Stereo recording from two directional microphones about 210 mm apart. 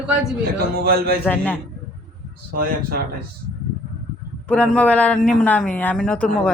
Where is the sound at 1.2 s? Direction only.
10° left (ahead or behind).